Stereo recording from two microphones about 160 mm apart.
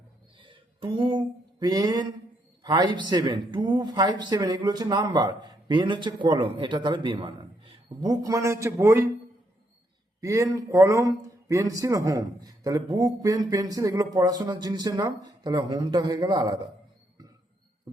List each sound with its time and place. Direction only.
0.3 s a sound: 30° right (ahead or behind)
2.6 s speech: 25° right (ahead or behind)
10.2 s speech: 20° right (ahead or behind)